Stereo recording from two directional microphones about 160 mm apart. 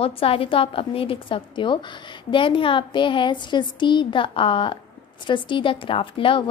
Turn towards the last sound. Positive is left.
turn(degrees=30)  # may be behind; listen again after turning